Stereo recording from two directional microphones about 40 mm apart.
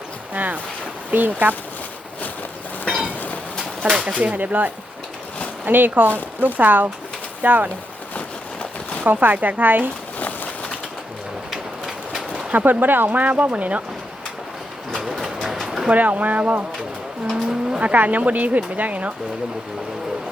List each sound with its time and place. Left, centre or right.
0.3 s speech: right
3.6 s bird: centre
4.2 s speech: right
9.0 s speech: right
11.5 s a sound: centre
12.3 s a sound: right
12.6 s speech: right
15.9 s speech: right
17.7 s vehicle: right
17.9 s speech: right